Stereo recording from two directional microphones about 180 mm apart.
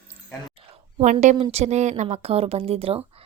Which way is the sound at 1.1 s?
35° right (ahead or behind).